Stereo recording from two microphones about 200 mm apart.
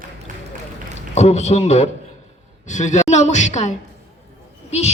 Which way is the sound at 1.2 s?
35° left (ahead or behind).